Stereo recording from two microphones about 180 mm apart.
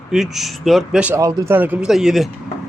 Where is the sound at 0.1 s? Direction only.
Centre (ahead or behind).